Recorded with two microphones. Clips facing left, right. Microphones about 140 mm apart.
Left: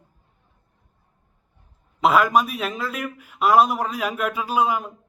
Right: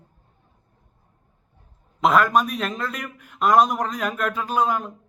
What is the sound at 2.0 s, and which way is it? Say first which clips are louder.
A man's voice: even; 5° left (ahead or behind).